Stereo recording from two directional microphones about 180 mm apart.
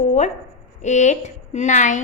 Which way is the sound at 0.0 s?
40° left (ahead or behind).